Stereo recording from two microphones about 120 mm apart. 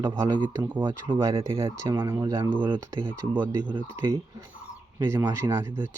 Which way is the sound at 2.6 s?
40° right (ahead or behind).